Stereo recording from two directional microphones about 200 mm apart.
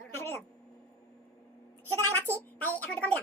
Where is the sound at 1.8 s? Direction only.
10° left (ahead or behind).